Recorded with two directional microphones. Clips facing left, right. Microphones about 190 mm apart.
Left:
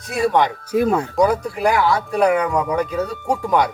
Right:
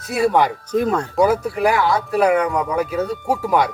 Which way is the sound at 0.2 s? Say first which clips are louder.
Right 1 dB; 5° right (ahead or behind).